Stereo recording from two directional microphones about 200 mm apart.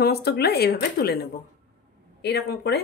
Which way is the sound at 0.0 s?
55° left (ahead or behind).